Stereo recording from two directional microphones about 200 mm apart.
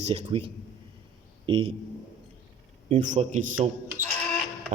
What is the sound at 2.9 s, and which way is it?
Speech, 40° right (ahead or behind).